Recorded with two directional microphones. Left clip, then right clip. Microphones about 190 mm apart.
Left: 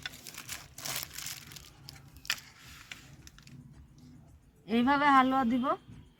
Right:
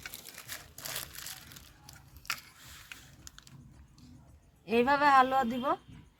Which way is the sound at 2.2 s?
25° left (ahead or behind).